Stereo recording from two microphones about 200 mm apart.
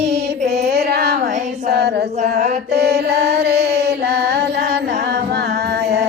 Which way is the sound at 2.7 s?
55° right (ahead or behind).